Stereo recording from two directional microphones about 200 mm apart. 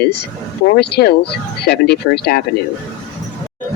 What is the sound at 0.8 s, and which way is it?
Speech, 55° left (ahead or behind).